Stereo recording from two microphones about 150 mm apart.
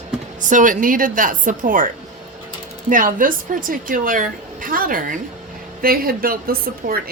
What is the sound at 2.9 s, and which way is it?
A woman's voice, 65° right (ahead or behind).